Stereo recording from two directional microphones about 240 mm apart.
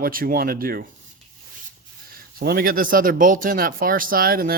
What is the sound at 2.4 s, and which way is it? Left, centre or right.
Speech, right.